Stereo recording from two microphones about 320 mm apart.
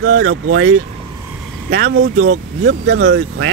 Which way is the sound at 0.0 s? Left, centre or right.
Right.